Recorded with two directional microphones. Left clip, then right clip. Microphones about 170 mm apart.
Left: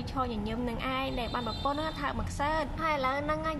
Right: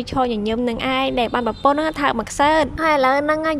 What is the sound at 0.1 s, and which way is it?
A woman's voice, 45° right (ahead or behind).